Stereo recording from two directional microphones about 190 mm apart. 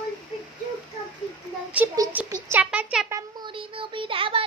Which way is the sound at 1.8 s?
10° right (ahead or behind).